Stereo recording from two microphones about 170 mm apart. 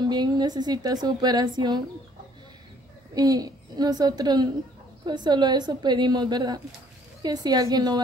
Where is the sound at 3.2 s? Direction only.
20° right (ahead or behind).